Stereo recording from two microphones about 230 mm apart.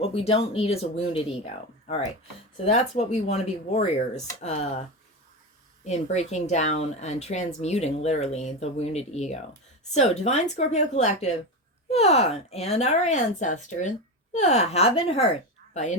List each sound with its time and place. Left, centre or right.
0.0 s speech: left
2.6 s speech: left
5.8 s speech: left